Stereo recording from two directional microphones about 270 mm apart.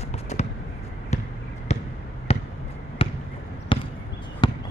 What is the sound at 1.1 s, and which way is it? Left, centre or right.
Basketball bounce, left.